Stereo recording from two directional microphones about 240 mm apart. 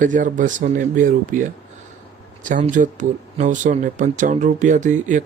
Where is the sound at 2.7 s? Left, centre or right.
Right.